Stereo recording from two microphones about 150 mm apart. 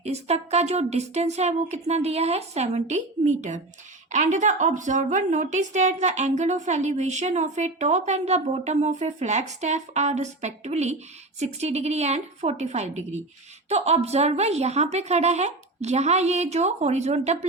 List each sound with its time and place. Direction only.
0.0 s a woman's voice: 45° right (ahead or behind)